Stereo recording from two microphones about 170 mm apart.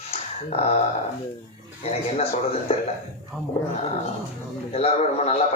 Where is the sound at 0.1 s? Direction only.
35° left (ahead or behind).